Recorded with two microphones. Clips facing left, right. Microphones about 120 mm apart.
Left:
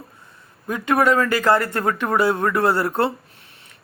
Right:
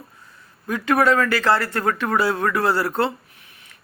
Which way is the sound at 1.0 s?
20° left (ahead or behind).